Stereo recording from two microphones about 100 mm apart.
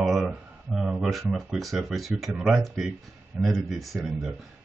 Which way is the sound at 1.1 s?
Centre (ahead or behind).